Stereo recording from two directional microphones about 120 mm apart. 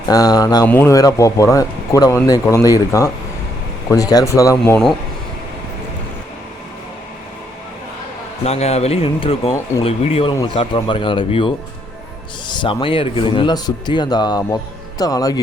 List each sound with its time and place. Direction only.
0.1 s speech: 30° left (ahead or behind)
8.4 s speech: 60° left (ahead or behind); by 15.4 s 30° left (ahead or behind)